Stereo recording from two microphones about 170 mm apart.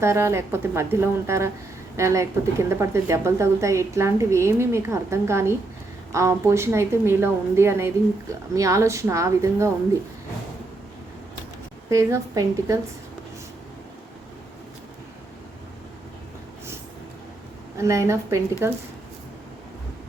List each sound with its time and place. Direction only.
0.0 s a woman's voice: 15° right (ahead or behind)
11.9 s a woman's voice: 15° right (ahead or behind)
17.7 s a woman's voice: 15° right (ahead or behind)